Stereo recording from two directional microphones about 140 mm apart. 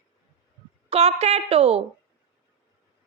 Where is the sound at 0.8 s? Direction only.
45° right (ahead or behind).